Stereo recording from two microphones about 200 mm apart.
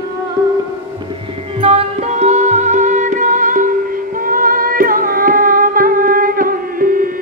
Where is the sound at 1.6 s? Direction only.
30° right (ahead or behind).